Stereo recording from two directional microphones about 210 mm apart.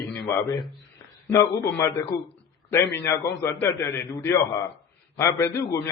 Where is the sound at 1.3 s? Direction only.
15° left (ahead or behind).